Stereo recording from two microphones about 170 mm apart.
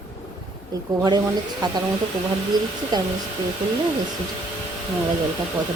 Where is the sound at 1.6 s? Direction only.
25° right (ahead or behind).